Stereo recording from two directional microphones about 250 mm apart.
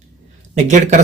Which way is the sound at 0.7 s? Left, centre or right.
Right.